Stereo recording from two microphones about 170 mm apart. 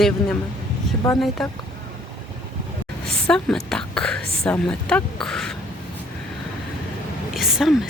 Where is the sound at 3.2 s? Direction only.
5° left (ahead or behind).